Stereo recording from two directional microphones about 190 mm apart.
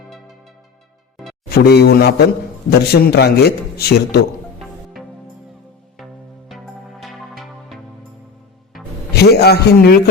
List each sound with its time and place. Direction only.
1.1 s music: centre (ahead or behind)
1.5 s a man's voice: 55° left (ahead or behind)
7.0 s music: centre (ahead or behind)
9.1 s a man's voice: 55° left (ahead or behind)